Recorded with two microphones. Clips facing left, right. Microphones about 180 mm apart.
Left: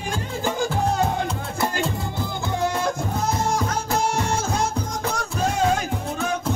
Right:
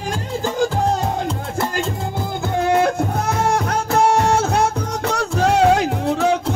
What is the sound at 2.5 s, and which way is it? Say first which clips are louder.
Music: right 8 dB; 60° right (ahead or behind).